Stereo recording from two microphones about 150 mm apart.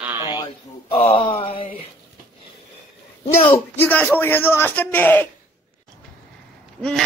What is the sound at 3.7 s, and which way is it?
A man's voice, 10° left (ahead or behind).